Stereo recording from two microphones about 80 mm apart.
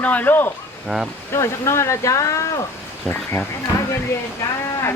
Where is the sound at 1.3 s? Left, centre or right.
Left.